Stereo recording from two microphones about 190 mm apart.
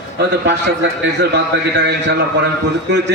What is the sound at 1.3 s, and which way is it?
Speech, 65° right (ahead or behind).